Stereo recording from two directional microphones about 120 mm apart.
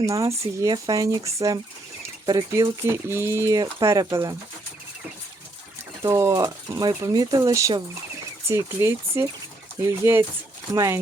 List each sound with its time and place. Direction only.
0.0 s speech: 25° right (ahead or behind)
6.0 s speech: 25° right (ahead or behind)